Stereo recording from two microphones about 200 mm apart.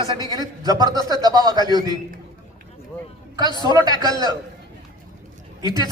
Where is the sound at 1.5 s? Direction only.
20° left (ahead or behind).